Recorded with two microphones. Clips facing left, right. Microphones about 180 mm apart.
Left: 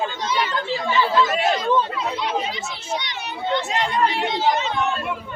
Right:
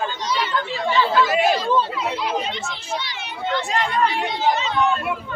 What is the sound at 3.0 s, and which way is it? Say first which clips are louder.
A child's voice: even; 20° left (ahead or behind).